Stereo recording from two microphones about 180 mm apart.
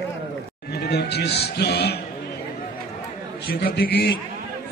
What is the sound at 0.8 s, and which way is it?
A man's voice, 65° left (ahead or behind).